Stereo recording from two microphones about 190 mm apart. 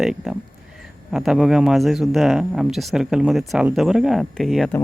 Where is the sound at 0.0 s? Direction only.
5° right (ahead or behind).